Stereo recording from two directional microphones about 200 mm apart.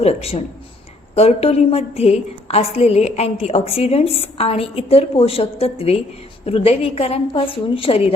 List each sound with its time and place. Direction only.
0.0 s a woman's voice: 30° left (ahead or behind)